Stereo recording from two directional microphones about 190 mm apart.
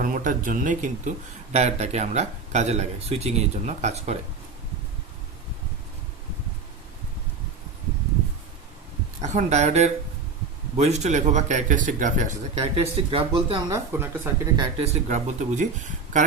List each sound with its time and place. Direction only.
0.0 s speech: 45° right (ahead or behind)
9.2 s speech: 35° right (ahead or behind)
13.7 s speech: 15° right (ahead or behind)
14.5 s speech: 35° right (ahead or behind)